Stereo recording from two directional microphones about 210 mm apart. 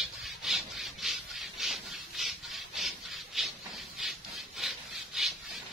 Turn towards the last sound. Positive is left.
turn(degrees=0)  # may be behind; listen again after turning